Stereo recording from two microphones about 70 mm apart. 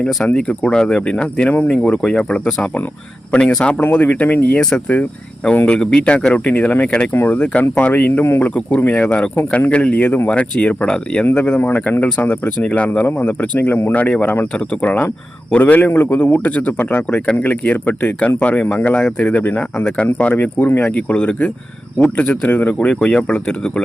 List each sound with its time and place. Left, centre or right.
0.3 s speech: centre
5.6 s speech: centre